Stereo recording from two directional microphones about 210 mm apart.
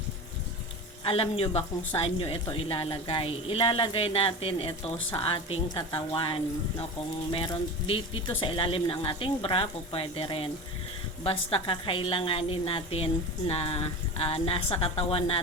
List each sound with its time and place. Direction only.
1.0 s a woman's voice: 25° left (ahead or behind)